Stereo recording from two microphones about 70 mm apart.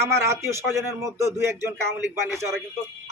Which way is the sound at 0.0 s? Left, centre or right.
Right.